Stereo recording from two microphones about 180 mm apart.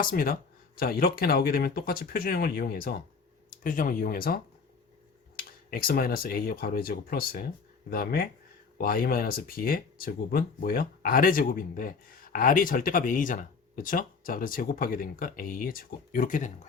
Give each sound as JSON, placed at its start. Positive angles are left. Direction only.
{"t": 0.0, "sound": "speech", "side_deg": 55}
{"t": 5.4, "sound": "speech", "side_deg": 55}